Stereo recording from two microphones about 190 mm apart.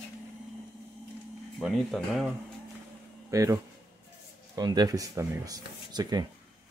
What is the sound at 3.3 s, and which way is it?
Speech, 15° right (ahead or behind).